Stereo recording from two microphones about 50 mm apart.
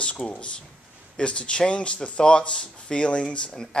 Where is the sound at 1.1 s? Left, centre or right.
Left.